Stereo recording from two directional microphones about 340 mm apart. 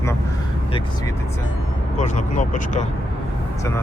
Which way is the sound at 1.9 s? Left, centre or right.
Left.